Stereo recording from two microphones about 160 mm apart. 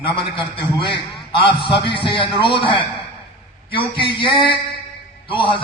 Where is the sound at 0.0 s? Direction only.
35° left (ahead or behind).